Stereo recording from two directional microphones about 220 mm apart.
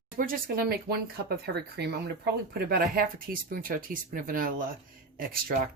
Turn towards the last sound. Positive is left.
turn(degrees=-40)  # may be behind; listen again after turning